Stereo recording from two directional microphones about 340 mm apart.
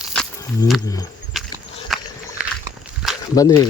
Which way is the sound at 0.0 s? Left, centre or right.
Centre.